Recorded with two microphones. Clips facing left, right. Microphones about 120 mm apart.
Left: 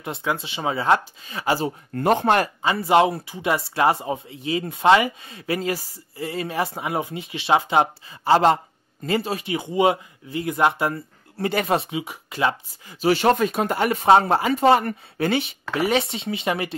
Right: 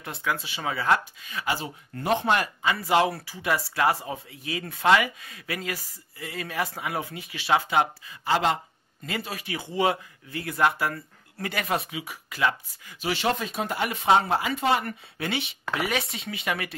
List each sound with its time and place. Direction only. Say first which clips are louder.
0.0 s speech: left 4 dB; 25° left (ahead or behind)
2.0 s speech: left 5 dB; 50° left (ahead or behind)
2.6 s speech: left 5 dB; 30° left (ahead or behind)
13.1 s speech: left 8 dB; 50° left (ahead or behind)
15.7 s speech: left 7 dB; 30° left (ahead or behind)